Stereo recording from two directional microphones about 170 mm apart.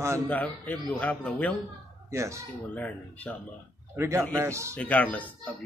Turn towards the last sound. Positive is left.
turn(degrees=10)  # may be behind; listen again after turning